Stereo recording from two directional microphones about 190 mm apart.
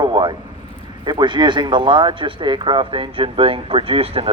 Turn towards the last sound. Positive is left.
turn(degrees=-30)  # may be behind; listen again after turning